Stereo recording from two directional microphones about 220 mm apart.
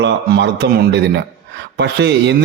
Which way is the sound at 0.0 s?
50° right (ahead or behind).